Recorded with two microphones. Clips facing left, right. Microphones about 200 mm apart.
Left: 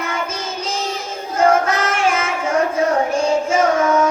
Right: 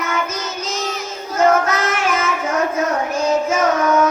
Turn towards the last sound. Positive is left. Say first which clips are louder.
# left 1 dB
turn(degrees=30)  # may be behind; listen again after turning